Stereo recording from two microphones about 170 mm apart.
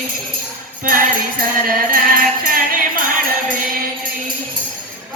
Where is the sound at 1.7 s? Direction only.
55° right (ahead or behind).